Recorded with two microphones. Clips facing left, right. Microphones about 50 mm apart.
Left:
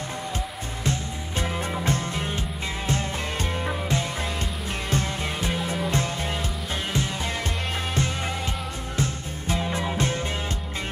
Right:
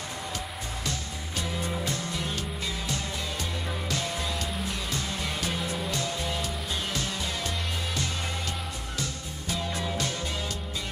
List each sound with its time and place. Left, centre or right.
0.8 s music: left
8.9 s music: left